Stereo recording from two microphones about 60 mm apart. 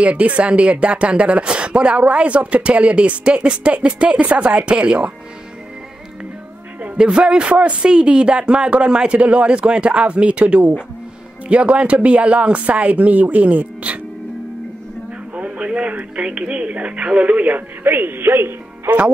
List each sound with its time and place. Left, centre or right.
0.0 s speech: right
7.0 s speech: centre
15.3 s speech: centre; by 18.5 s right
18.9 s speech: right